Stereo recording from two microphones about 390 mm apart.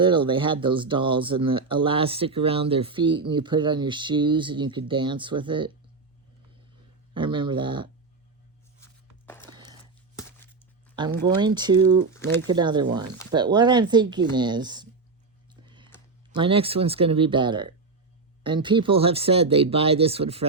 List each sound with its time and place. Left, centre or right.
0.0 s speech: centre
7.1 s speech: centre
9.4 s a sound: centre
11.0 s speech: centre
15.6 s a sound: centre
16.3 s speech: centre